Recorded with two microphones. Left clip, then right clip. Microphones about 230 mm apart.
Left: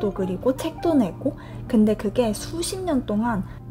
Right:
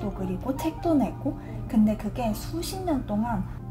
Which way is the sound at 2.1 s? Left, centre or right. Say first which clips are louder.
Left 7 dB; left.